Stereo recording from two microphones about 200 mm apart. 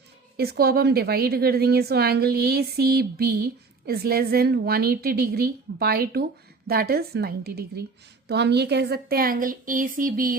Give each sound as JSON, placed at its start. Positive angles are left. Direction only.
{"t": 0.3, "sound": "a woman's voice", "side_deg": -50}